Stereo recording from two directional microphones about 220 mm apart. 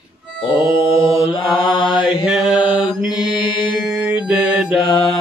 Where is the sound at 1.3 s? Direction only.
20° left (ahead or behind).